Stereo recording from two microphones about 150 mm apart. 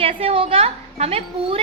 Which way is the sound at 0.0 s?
40° right (ahead or behind).